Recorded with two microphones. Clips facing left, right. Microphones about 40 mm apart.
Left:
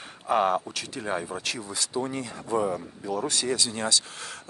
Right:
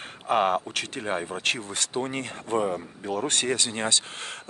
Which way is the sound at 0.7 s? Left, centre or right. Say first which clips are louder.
Right 2 dB; right.